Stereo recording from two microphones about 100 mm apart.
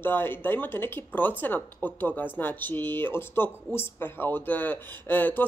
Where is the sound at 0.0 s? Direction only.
20° left (ahead or behind).